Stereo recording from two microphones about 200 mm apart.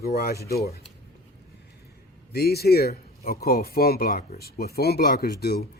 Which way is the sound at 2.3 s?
50° left (ahead or behind).